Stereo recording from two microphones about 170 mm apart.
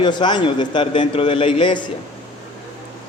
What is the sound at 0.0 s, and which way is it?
A man's voice, 25° left (ahead or behind).